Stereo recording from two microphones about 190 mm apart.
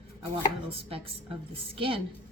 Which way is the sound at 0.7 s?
30° right (ahead or behind).